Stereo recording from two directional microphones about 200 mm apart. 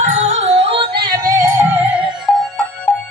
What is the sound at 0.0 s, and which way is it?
Music, 35° right (ahead or behind).